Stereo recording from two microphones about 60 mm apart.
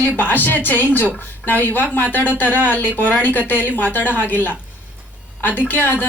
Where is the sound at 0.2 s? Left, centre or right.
Left.